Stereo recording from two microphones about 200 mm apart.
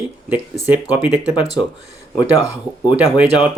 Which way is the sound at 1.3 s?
20° left (ahead or behind).